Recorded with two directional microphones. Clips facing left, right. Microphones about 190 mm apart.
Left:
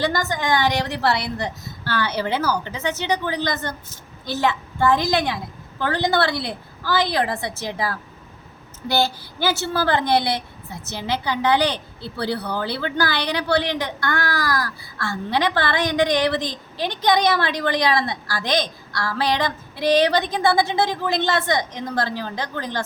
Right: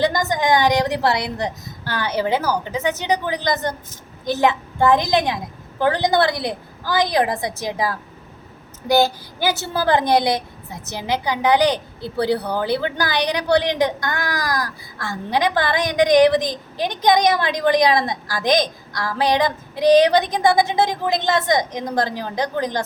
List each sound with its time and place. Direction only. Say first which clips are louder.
0.0 s a woman's voice: right 4 dB; 20° right (ahead or behind)